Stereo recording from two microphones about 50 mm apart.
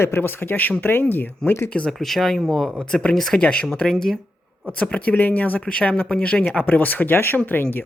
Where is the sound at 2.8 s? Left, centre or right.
Centre.